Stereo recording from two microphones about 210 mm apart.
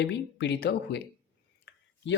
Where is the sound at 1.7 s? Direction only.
55° left (ahead or behind).